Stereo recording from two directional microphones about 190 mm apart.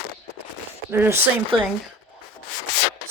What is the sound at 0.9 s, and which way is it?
Speech, 10° right (ahead or behind).